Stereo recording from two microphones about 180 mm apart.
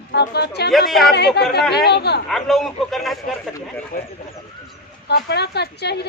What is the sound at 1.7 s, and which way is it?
Speech, 65° left (ahead or behind).